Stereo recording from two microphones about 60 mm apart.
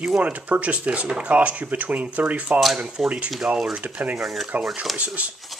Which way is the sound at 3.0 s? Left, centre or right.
Right.